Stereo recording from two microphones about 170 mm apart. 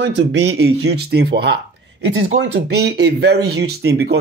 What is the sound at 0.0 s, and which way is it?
Speech, 90° right.